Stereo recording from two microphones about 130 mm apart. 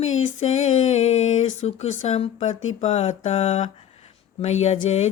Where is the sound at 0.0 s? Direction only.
60° left (ahead or behind).